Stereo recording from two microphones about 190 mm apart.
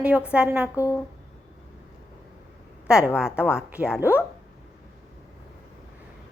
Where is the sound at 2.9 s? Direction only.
5° right (ahead or behind).